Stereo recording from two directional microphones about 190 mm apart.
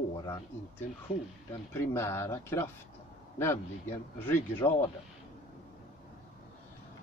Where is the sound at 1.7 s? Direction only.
15° left (ahead or behind).